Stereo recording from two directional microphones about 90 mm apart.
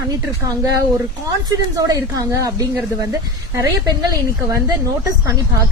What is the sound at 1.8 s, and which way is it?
A woman's voice, 40° right (ahead or behind).